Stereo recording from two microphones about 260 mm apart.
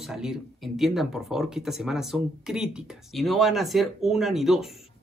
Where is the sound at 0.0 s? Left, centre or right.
Centre.